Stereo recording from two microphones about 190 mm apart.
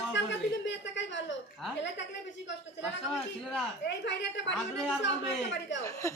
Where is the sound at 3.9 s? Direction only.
65° left (ahead or behind).